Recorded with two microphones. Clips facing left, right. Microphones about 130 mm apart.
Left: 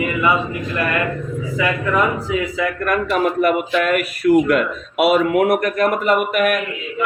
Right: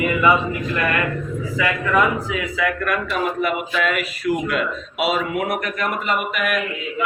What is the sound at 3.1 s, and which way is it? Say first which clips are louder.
Speech: left 8 dB; 50° left (ahead or behind).